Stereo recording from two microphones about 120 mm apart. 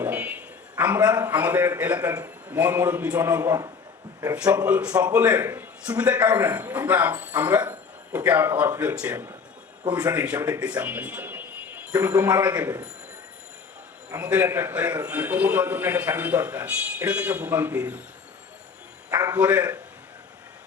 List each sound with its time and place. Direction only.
0.0 s a sound: 15° right (ahead or behind)
1.2 s a man's voice: 15° right (ahead or behind)
4.4 s a man's voice: 10° right (ahead or behind)
14.2 s a man's voice: 15° right (ahead or behind)
19.1 s a man's voice: 30° right (ahead or behind)
19.4 s a man's voice: 15° right (ahead or behind)